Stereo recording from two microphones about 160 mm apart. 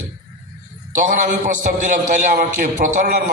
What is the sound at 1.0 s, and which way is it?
A man's voice, 50° right (ahead or behind).